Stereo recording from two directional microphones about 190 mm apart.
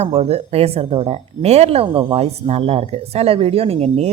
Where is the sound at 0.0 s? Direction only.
35° right (ahead or behind).